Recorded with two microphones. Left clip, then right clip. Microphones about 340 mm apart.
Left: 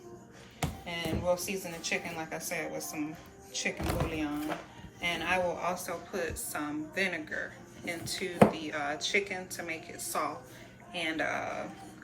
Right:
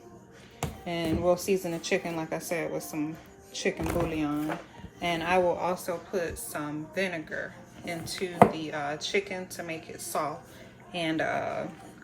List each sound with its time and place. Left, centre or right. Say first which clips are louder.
0.9 s music: right 5 dB; centre
1.8 s speech: right 4 dB; centre